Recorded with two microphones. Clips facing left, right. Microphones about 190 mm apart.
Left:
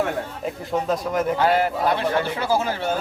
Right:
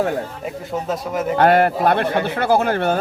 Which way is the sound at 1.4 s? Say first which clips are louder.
Right 9 dB; 60° right (ahead or behind).